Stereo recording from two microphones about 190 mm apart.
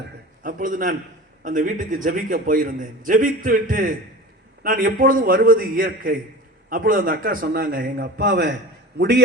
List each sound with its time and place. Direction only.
0.4 s a man's voice: 45° right (ahead or behind); by 9.2 s 60° right (ahead or behind)